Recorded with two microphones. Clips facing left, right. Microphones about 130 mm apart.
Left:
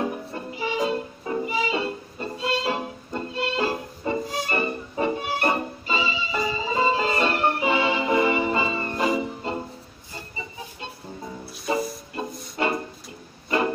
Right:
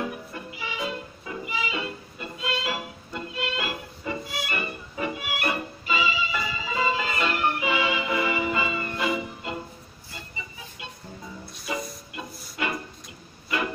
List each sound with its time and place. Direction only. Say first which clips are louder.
0.0 s music: left 4 dB; 30° left (ahead or behind)
10.1 s chicken: left 5 dB; 35° left (ahead or behind)
11.7 s music: left 7 dB; 35° left (ahead or behind)